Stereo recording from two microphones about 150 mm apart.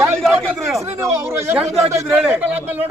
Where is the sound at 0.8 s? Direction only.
20° right (ahead or behind).